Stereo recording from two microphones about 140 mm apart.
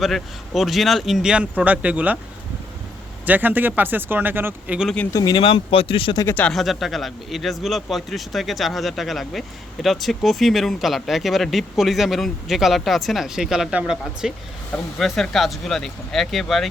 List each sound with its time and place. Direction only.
0.0 s speech: centre (ahead or behind)
3.2 s speech: 15° right (ahead or behind)
5.1 s speech: 30° left (ahead or behind)
6.1 s speech: 15° left (ahead or behind)
6.5 s speech: centre (ahead or behind)